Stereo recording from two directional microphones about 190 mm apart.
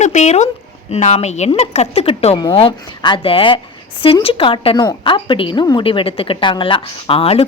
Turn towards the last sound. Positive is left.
turn(degrees=30)  # may be behind; listen again after turning